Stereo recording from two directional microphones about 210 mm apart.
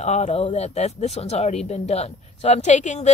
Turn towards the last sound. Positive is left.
turn(degrees=35)  # may be behind; listen again after turning